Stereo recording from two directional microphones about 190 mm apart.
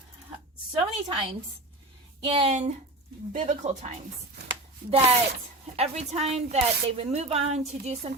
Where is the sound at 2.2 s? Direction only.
30° right (ahead or behind).